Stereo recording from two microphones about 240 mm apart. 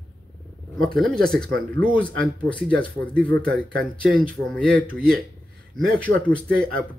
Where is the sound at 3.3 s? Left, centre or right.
Right.